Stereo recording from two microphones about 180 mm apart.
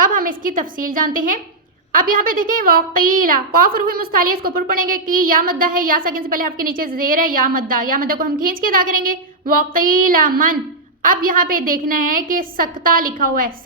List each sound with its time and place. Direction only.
0.0 s a woman's voice: 50° right (ahead or behind)